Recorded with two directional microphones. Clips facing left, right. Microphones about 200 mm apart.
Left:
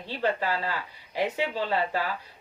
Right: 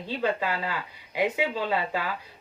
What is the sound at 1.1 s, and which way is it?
Speech, 15° right (ahead or behind).